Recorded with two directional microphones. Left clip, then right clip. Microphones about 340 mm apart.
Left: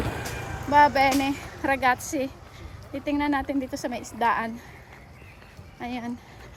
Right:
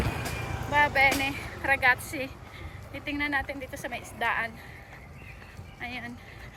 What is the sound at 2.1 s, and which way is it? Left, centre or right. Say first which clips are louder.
Speech: left 5 dB; left.